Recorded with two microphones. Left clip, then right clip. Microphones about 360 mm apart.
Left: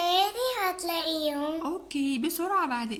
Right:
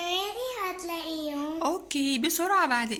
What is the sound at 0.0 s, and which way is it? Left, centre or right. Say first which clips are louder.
Child singing: left 5 dB; left.